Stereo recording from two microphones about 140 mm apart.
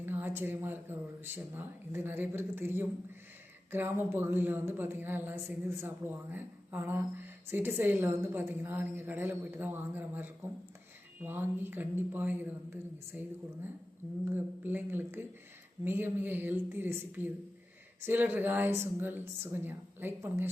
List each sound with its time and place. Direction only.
0.0 s speech: 15° right (ahead or behind)